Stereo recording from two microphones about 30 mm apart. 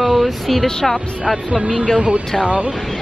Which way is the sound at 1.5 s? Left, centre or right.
Right.